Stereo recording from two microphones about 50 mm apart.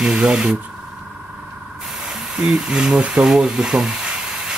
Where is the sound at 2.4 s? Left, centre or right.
Centre.